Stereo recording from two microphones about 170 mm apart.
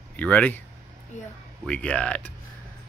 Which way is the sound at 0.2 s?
10° left (ahead or behind).